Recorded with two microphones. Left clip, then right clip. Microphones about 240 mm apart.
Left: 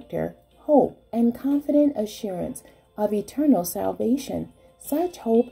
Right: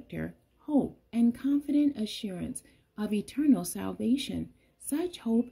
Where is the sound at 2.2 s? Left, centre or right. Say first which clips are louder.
Left 10 dB; right.